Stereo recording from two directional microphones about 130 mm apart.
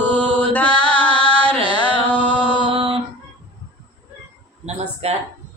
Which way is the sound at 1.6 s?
40° left (ahead or behind).